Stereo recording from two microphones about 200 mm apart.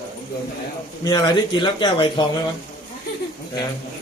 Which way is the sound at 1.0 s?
20° left (ahead or behind).